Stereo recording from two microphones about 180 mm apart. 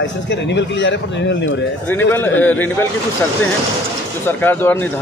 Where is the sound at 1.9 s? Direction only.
10° left (ahead or behind).